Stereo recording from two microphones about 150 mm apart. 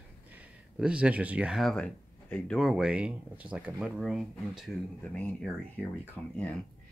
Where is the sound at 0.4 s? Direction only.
5° right (ahead or behind).